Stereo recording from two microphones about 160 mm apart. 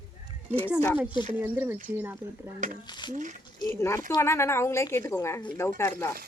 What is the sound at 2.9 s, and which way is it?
Speech, 25° left (ahead or behind).